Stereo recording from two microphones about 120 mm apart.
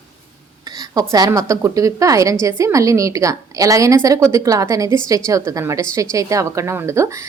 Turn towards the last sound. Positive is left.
turn(degrees=-25)  # may be behind; listen again after turning